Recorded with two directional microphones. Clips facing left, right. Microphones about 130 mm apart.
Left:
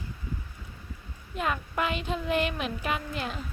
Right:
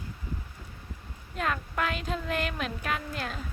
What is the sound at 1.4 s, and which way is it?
Speech, 5° left (ahead or behind).